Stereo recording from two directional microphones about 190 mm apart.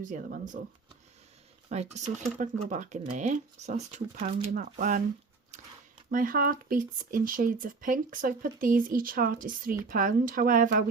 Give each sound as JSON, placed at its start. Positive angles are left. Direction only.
{"t": 0.0, "sound": "speech", "side_deg": -40}
{"t": 1.7, "sound": "speech", "side_deg": -35}
{"t": 6.1, "sound": "speech", "side_deg": -45}